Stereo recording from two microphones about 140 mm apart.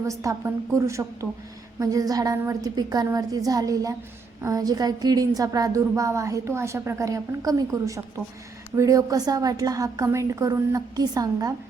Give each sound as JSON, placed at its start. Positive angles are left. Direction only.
{"t": 0.0, "sound": "a woman's voice", "side_deg": -20}